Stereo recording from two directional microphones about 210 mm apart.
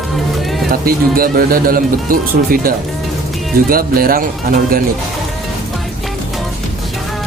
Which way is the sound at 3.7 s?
45° right (ahead or behind).